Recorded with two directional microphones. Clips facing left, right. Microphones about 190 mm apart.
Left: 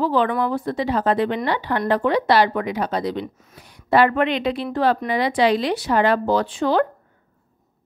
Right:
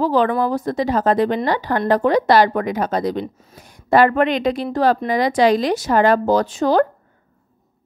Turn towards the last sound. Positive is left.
turn(degrees=-40)  # may be behind; listen again after turning